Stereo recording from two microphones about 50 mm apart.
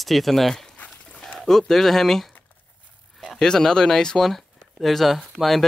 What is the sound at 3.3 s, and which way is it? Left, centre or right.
Speech, centre.